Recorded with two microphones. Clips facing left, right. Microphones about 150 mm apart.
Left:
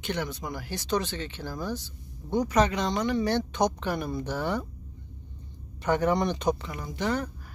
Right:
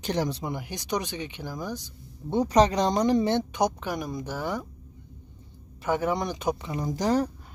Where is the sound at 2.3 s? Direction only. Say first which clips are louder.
Right 3 dB; 30° right (ahead or behind).